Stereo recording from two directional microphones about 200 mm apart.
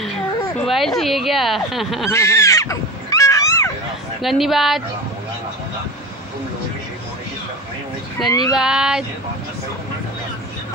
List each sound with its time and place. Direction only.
0.7 s speech: centre (ahead or behind)
2.0 s a sound: 15° left (ahead or behind)
4.2 s speech: centre (ahead or behind)
8.3 s speech: 15° left (ahead or behind)
8.5 s speech: 5° right (ahead or behind)